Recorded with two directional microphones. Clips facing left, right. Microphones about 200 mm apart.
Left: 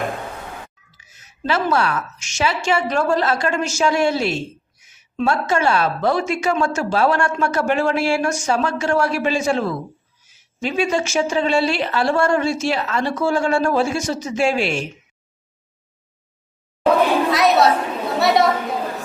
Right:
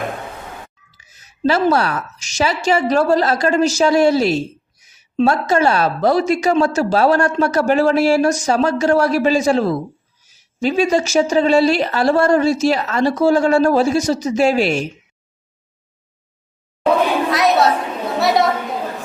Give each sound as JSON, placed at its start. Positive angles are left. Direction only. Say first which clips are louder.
{"t": 0.9, "sound": "a woman's voice", "louder": "even", "side_deg": -35}
{"t": 16.8, "sound": "chatter", "louder": "even", "side_deg": 0}
{"t": 18.2, "sound": "a woman's voice", "louder": "even", "side_deg": 0}